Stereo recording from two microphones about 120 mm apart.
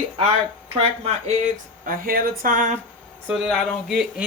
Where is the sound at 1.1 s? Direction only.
75° right (ahead or behind).